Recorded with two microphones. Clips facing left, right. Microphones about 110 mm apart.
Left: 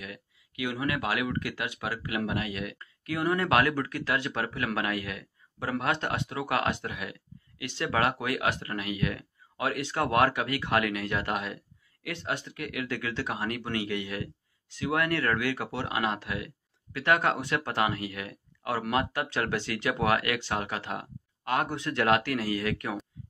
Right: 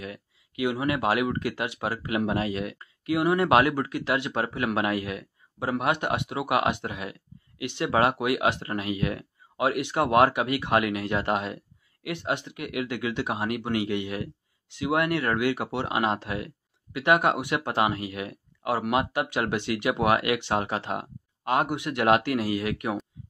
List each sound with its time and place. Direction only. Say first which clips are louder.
0.0 s speech: right 4 dB; 30° right (ahead or behind)